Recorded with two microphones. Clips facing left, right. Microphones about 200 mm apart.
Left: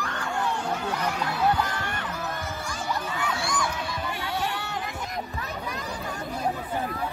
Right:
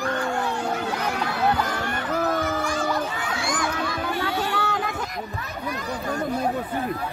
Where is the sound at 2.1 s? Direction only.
90° right.